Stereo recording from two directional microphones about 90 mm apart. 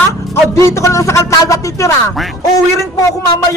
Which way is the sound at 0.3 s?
30° left (ahead or behind).